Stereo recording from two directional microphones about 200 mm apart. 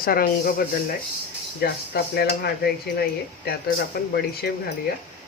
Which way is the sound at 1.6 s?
50° left (ahead or behind).